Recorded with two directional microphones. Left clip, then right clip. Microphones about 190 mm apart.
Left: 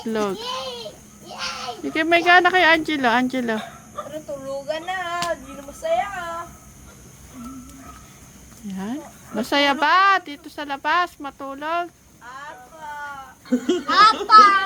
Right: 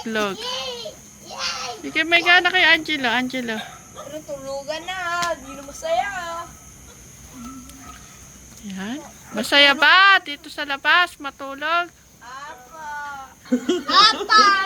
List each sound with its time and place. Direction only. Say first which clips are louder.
0.0 s a child's voice: even; 15° left (ahead or behind)
1.4 s speech: right 1 dB; 30° left (ahead or behind)
4.6 s speech: left 2 dB; centre (ahead or behind)
8.6 s speech: even; 20° left (ahead or behind)
13.5 s speech: right 1 dB; centre (ahead or behind)